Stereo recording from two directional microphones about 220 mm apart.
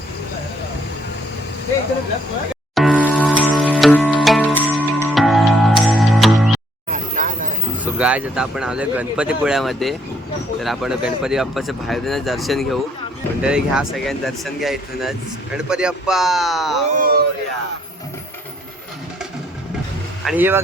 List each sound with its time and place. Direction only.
2.7 s music: centre (ahead or behind)
4.6 s music: 10° right (ahead or behind)
6.8 s a sound: 35° right (ahead or behind)
7.9 s speech: 5° right (ahead or behind)
16.8 s speech: 35° right (ahead or behind)
20.2 s speech: 10° right (ahead or behind)